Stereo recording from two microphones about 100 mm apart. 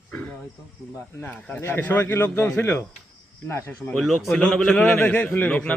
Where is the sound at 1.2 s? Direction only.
15° left (ahead or behind).